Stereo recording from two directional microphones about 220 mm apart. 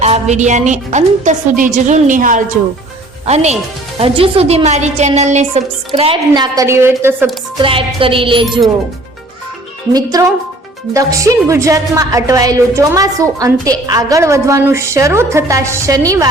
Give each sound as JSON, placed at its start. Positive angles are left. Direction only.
{"t": 0.0, "sound": "a woman's voice", "side_deg": -30}
{"t": 7.6, "sound": "a woman's voice", "side_deg": -25}
{"t": 9.9, "sound": "speech", "side_deg": -15}